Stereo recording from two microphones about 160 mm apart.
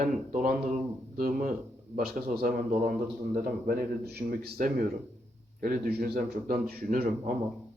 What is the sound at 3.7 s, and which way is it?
A man's voice, 75° right (ahead or behind).